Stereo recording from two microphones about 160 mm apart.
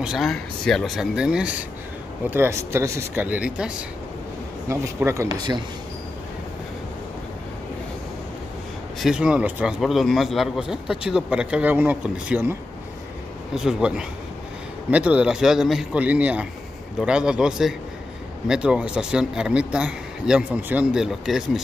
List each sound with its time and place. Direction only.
0.0 s a man's voice: centre (ahead or behind)
4.6 s speech: 20° right (ahead or behind)
9.0 s a man's voice: 5° right (ahead or behind)
13.6 s a man's voice: 5° right (ahead or behind)